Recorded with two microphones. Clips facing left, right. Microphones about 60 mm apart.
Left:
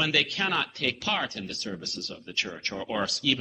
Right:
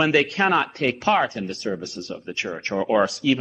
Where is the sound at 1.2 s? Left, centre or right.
Centre.